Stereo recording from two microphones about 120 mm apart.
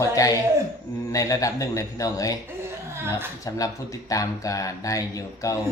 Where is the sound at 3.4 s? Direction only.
30° left (ahead or behind).